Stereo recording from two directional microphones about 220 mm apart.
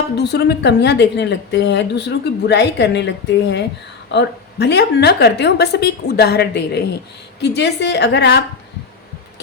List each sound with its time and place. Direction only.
0.2 s a woman's voice: 50° left (ahead or behind)